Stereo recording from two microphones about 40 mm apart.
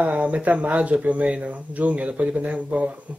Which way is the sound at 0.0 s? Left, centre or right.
Right.